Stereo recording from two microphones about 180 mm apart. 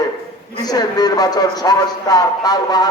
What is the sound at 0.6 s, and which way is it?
A man's voice, 20° left (ahead or behind).